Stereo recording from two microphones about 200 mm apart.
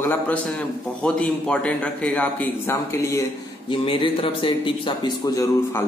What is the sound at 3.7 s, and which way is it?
Speech, 25° left (ahead or behind).